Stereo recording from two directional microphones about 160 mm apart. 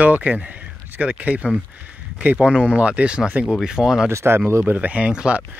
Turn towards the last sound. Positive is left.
turn(degrees=-10)  # may be behind; listen again after turning